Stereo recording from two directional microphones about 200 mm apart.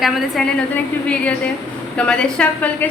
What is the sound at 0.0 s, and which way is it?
A woman's voice, centre (ahead or behind).